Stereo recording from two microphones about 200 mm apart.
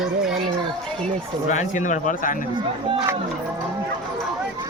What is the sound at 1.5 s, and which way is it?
Speech, 40° left (ahead or behind).